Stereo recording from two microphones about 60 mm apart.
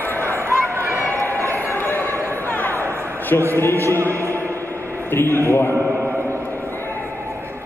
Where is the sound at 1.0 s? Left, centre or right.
Left.